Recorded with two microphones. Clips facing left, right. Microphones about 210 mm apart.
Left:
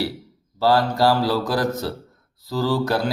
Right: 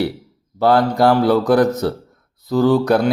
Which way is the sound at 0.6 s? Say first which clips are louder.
Right 4 dB; 20° right (ahead or behind).